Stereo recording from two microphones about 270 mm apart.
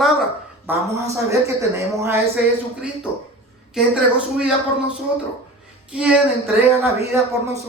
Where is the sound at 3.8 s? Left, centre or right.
Centre.